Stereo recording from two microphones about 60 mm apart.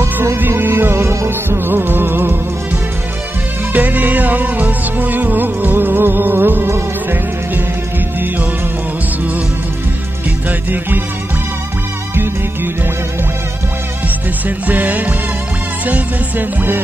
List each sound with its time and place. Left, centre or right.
0.0 s music: right
3.7 s music: right
14.7 s music: right